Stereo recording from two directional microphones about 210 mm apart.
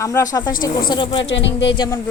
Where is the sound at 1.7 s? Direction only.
20° left (ahead or behind).